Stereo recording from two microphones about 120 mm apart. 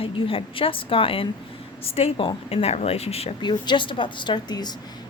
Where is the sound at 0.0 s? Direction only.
50° left (ahead or behind).